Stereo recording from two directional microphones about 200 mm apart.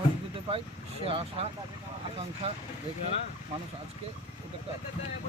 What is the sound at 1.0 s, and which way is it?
Speech, 30° right (ahead or behind).